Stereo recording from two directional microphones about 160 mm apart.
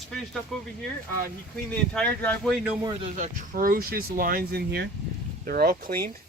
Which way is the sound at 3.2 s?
60° right (ahead or behind).